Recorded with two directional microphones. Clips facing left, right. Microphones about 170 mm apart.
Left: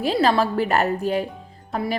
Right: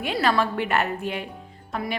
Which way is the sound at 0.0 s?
35° left (ahead or behind).